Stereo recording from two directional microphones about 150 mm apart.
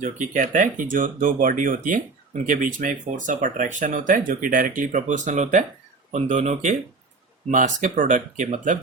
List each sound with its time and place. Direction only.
0.0 s speech: 60° right (ahead or behind)